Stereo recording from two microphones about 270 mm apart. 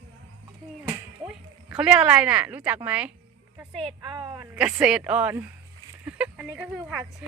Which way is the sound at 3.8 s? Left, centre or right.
Centre.